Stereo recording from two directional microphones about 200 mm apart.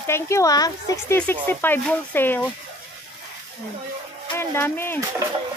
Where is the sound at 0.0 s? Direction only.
15° left (ahead or behind).